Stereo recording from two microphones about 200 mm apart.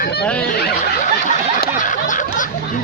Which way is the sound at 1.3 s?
40° left (ahead or behind).